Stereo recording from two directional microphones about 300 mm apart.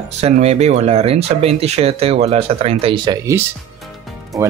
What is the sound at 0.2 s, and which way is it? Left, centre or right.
Speech, right.